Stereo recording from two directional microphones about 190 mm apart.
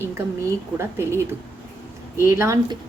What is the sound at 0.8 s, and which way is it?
A woman's voice, 15° right (ahead or behind).